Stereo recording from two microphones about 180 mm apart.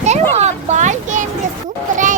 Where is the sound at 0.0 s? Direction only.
40° right (ahead or behind).